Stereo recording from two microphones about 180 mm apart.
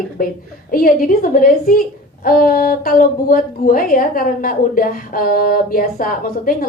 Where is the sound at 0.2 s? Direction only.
55° left (ahead or behind).